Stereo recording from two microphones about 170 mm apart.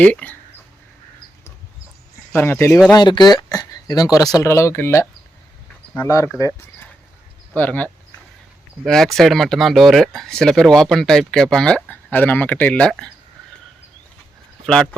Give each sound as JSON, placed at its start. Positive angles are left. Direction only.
{"t": 0.0, "sound": "speech", "side_deg": 10}
{"t": 2.3, "sound": "speech", "side_deg": 15}
{"t": 6.1, "sound": "speech", "side_deg": 20}
{"t": 7.5, "sound": "speech", "side_deg": 10}